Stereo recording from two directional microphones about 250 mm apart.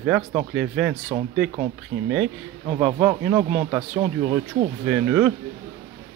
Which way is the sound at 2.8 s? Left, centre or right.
Centre.